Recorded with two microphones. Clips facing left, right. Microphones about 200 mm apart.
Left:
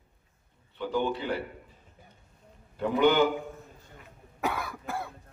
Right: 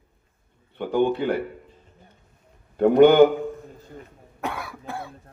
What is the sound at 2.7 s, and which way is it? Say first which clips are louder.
Speech: right 10 dB; 55° right (ahead or behind).